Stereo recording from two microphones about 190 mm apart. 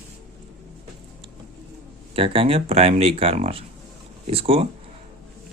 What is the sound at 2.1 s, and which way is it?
Speech, 30° right (ahead or behind).